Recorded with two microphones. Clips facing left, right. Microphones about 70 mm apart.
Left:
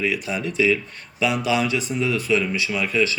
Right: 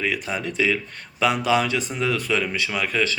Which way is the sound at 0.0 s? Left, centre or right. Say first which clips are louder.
Left 1 dB; right.